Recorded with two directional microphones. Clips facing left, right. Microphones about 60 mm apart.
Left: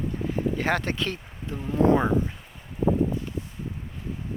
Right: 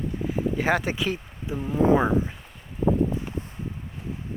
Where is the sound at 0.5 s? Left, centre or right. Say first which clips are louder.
Right 2 dB; centre.